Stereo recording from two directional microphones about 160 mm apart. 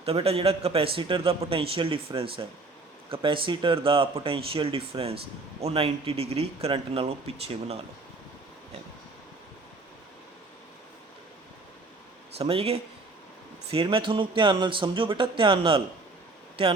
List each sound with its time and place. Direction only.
0.0 s speech: 40° right (ahead or behind)
12.4 s speech: 35° right (ahead or behind)